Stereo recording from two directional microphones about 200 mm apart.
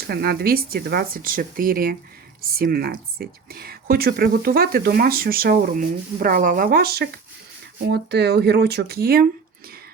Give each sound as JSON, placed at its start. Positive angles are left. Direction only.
{"t": 0.1, "sound": "speech", "side_deg": -50}